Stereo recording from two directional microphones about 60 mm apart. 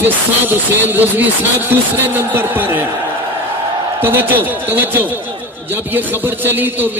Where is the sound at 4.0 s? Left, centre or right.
Right.